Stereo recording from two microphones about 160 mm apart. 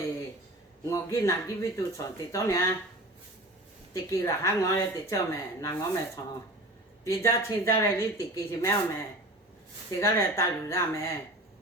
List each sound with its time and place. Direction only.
0.9 s a woman's voice: 20° left (ahead or behind)
3.9 s a woman's voice: 20° left (ahead or behind)
7.0 s a woman's voice: 15° left (ahead or behind)